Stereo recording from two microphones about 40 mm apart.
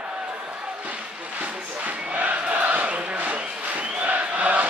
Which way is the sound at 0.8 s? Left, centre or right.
Right.